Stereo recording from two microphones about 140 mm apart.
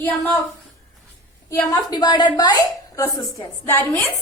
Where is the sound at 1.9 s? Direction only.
30° left (ahead or behind).